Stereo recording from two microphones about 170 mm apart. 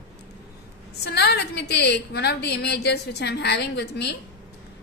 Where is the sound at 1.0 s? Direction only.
75° left (ahead or behind).